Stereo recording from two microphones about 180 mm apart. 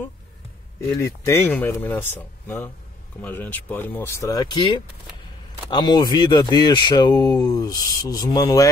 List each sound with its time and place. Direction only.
1.0 s speech: 15° left (ahead or behind)